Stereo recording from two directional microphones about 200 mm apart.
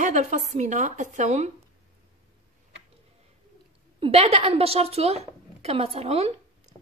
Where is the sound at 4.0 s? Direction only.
30° right (ahead or behind).